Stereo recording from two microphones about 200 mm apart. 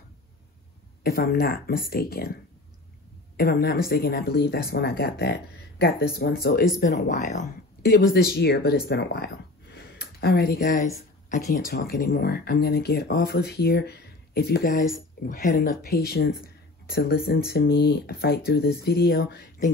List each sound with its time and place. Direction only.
1.0 s speech: 50° left (ahead or behind)
3.3 s speech: 50° left (ahead or behind)
9.8 s a sound: 50° left (ahead or behind)
11.2 s speech: 45° left (ahead or behind)